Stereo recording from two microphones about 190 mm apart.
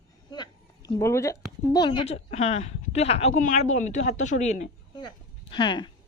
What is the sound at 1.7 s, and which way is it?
A woman's voice, 30° left (ahead or behind).